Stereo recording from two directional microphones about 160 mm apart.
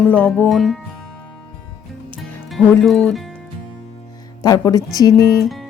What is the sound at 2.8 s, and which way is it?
Speech, 5° left (ahead or behind).